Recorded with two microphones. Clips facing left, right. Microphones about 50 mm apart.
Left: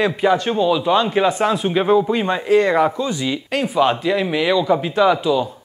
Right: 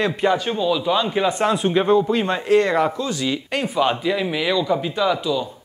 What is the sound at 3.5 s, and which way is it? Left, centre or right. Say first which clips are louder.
Speech: left 4 dB; centre.